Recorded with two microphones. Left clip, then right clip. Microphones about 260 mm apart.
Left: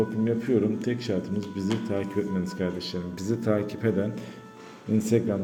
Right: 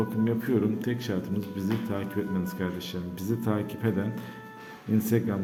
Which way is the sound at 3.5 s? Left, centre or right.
Centre.